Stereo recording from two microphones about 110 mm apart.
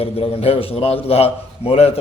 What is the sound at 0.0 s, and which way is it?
A man's voice, 60° left (ahead or behind).